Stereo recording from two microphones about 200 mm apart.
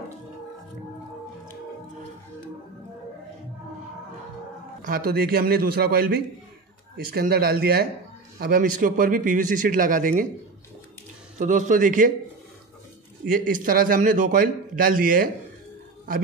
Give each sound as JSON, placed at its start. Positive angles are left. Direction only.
{"t": 4.8, "sound": "a man's voice", "side_deg": -45}
{"t": 11.3, "sound": "a man's voice", "side_deg": -40}
{"t": 13.3, "sound": "a man's voice", "side_deg": -45}